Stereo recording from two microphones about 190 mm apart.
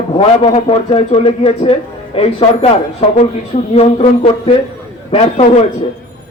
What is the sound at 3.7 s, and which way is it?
A man's voice, 30° left (ahead or behind).